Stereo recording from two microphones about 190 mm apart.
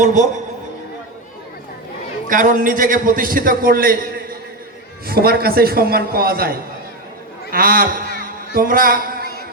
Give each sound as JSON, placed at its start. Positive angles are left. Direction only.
{"t": 0.0, "sound": "a man's voice", "side_deg": -40}
{"t": 2.3, "sound": "a man's voice", "side_deg": -45}
{"t": 5.0, "sound": "a man's voice", "side_deg": -55}
{"t": 8.2, "sound": "a sound", "side_deg": -50}